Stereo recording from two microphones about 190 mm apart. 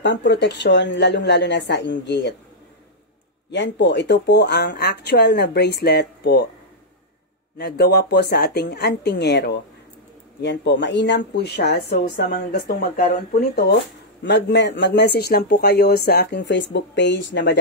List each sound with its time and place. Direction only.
0.0 s speech: 70° left (ahead or behind)
3.5 s speech: 65° left (ahead or behind)
7.5 s speech: 55° left (ahead or behind)
12.9 s speech: 45° left (ahead or behind)
14.2 s speech: 65° left (ahead or behind)